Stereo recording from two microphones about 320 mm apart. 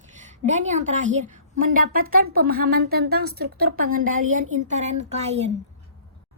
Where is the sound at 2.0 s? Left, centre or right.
Right.